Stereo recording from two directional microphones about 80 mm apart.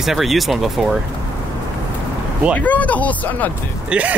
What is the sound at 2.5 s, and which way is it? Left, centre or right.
Speech, centre.